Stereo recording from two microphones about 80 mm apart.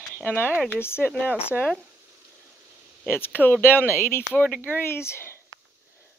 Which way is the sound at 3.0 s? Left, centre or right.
Left.